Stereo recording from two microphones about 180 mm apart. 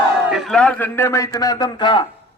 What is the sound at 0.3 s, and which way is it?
A man's voice, centre (ahead or behind).